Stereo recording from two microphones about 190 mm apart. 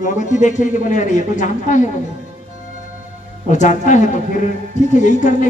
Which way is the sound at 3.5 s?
40° left (ahead or behind).